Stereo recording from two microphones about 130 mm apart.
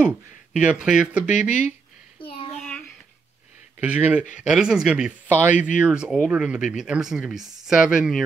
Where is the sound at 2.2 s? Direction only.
45° left (ahead or behind).